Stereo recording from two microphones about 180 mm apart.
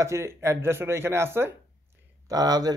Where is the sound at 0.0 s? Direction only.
15° right (ahead or behind).